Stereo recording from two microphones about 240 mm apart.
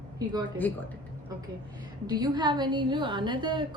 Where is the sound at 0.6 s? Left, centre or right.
Centre.